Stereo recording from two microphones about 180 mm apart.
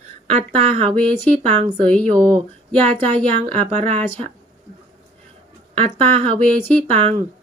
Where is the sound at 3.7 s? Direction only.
40° right (ahead or behind).